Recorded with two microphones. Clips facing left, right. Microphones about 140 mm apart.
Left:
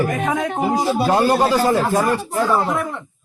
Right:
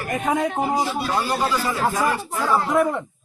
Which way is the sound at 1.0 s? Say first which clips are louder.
Left 7 dB; 60° left (ahead or behind).